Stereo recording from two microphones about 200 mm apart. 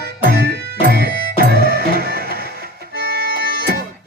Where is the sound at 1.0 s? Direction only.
50° right (ahead or behind).